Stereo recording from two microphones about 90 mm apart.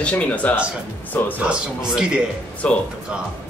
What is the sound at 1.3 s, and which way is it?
Speech, 10° right (ahead or behind).